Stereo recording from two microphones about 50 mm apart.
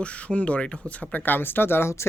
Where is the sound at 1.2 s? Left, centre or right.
Left.